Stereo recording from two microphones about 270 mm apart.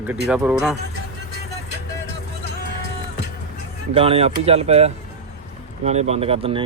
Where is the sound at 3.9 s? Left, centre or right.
Right.